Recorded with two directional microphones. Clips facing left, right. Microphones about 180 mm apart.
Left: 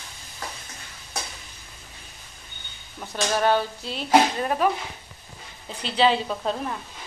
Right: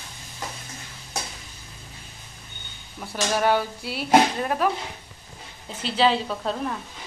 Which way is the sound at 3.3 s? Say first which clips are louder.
Even; 10° right (ahead or behind).